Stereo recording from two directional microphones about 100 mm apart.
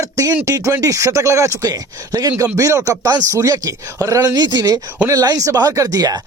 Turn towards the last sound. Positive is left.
turn(degrees=-40)  # may be behind; listen again after turning